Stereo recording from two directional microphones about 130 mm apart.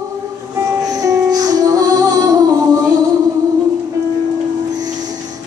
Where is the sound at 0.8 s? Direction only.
30° right (ahead or behind).